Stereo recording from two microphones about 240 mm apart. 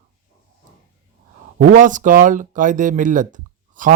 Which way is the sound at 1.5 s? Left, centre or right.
Right.